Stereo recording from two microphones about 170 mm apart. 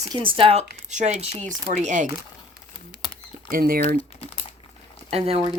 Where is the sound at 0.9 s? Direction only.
45° right (ahead or behind).